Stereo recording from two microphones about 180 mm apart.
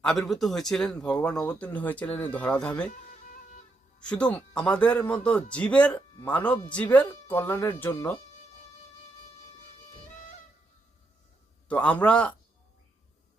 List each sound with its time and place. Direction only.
0.0 s a man's voice: centre (ahead or behind)
4.0 s speech: 5° left (ahead or behind)
11.7 s speech: 10° left (ahead or behind)